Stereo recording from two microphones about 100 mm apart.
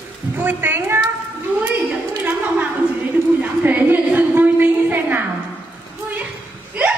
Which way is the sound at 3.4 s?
20° right (ahead or behind).